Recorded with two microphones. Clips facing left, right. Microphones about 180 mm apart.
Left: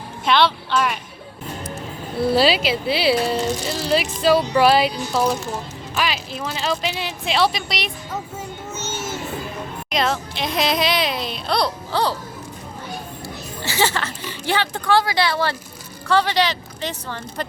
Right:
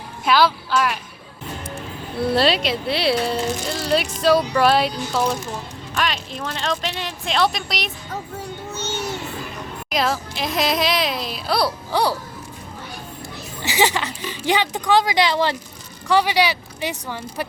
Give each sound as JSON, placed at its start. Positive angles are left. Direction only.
{"t": 0.3, "sound": "speech", "side_deg": -5}
{"t": 2.3, "sound": "speech", "side_deg": 5}
{"t": 8.9, "sound": "music", "side_deg": 0}
{"t": 9.9, "sound": "speech", "side_deg": 0}
{"t": 13.6, "sound": "speech", "side_deg": -15}